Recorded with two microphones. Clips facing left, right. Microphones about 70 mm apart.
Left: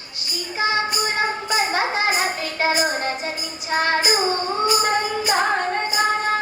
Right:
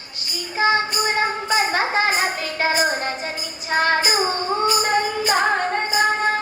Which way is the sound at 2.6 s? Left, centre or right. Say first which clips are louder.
Even; right.